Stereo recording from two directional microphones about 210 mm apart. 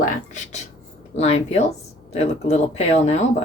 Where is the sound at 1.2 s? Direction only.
30° left (ahead or behind).